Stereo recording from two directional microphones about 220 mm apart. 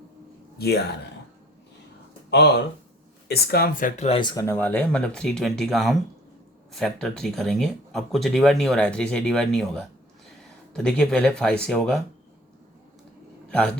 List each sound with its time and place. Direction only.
0.6 s speech: 50° left (ahead or behind)
3.2 s speech: 45° left (ahead or behind); by 12.0 s centre (ahead or behind)